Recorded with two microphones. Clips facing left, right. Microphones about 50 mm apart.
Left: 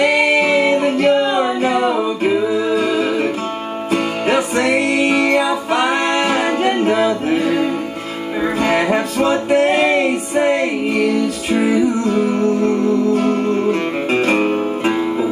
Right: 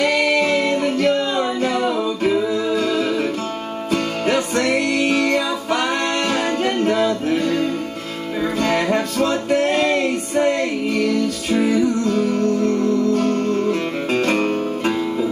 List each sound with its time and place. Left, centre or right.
0.0 s music: centre